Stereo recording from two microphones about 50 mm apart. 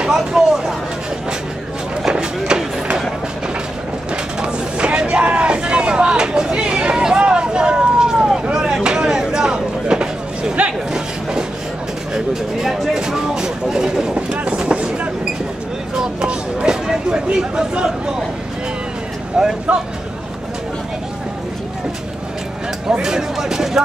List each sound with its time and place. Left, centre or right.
0.0 s speech: centre
2.0 s a sound: centre
4.4 s vehicle: right
12.1 s speech: centre
16.0 s speech: centre
19.3 s speech: centre
22.8 s speech: centre